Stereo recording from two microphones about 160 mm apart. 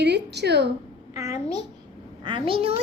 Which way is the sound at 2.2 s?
30° right (ahead or behind).